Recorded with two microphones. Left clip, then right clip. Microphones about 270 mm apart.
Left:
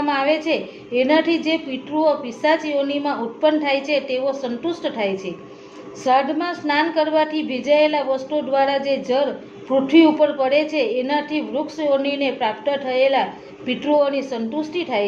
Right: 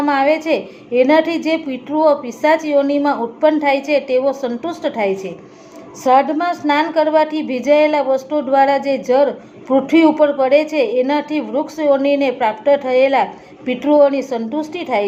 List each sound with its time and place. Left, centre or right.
0.1 s a woman's voice: right